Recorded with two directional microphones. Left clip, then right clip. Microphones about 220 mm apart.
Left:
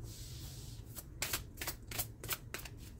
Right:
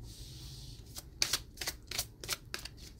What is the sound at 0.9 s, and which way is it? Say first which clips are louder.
Shuffling cards: right 7 dB; 15° right (ahead or behind).